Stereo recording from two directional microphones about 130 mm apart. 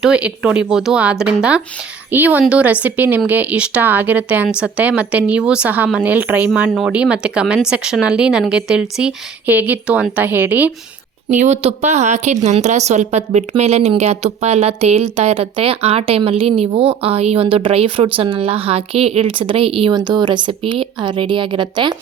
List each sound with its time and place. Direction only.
0.0 s speech: 10° right (ahead or behind)
11.3 s a woman's voice: 65° right (ahead or behind); by 19.9 s 45° right (ahead or behind)
19.9 s a woman's voice: 35° right (ahead or behind)